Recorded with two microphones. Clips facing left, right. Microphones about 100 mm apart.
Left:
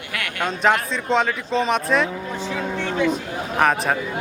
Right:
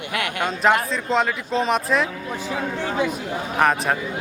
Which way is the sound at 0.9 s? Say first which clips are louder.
Left 1 dB; centre (ahead or behind).